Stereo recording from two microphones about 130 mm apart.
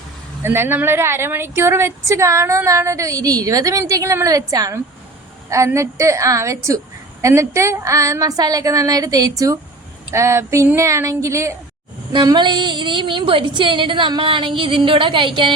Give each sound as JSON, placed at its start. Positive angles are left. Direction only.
{"t": 0.4, "sound": "a woman's voice", "side_deg": -15}
{"t": 12.1, "sound": "a woman's voice", "side_deg": -35}